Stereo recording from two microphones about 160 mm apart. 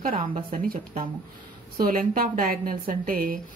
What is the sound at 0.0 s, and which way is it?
A woman's voice, 65° right (ahead or behind).